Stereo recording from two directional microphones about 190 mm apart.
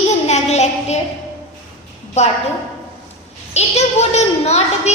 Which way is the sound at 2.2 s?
35° left (ahead or behind).